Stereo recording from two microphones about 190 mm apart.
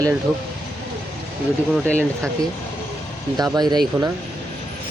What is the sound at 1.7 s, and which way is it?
Speech, 5° left (ahead or behind).